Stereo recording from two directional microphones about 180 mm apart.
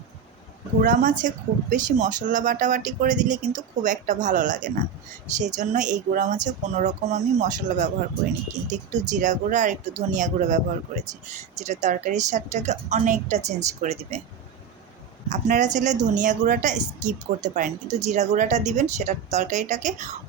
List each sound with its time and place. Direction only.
0.8 s speech: 50° right (ahead or behind)
15.3 s speech: 45° right (ahead or behind)